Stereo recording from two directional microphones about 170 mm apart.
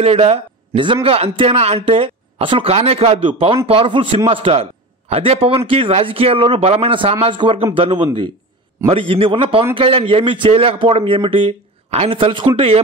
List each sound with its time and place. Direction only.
0.0 s a man's voice: 35° right (ahead or behind)